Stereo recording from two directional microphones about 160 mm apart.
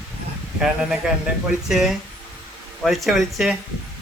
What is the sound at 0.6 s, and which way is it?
Speech, 5° right (ahead or behind).